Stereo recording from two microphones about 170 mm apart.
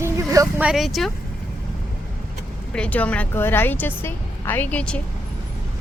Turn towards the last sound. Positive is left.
turn(degrees=5)  # may be behind; listen again after turning